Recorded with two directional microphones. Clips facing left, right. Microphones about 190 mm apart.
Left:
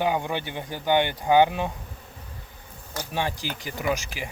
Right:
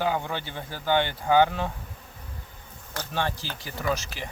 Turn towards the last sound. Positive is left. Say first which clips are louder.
# left 2 dB
turn(degrees=15)  # may be behind; listen again after turning